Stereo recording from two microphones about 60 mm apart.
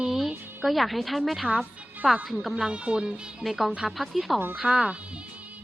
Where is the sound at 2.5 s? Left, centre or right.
Centre.